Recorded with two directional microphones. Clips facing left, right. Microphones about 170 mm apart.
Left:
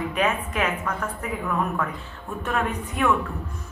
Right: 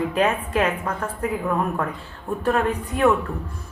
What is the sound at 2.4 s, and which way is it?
Speech, 35° right (ahead or behind).